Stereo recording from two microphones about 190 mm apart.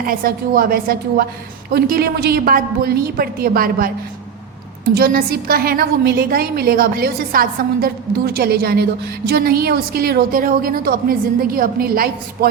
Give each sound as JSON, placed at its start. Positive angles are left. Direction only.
{"t": 0.0, "sound": "a woman's voice", "side_deg": -50}
{"t": 4.9, "sound": "a woman's voice", "side_deg": -55}